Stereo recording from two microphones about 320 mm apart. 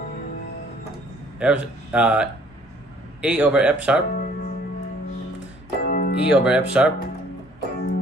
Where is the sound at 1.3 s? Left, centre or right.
Centre.